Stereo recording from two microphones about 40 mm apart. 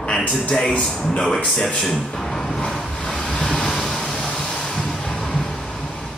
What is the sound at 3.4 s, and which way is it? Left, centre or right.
Vehicle, centre.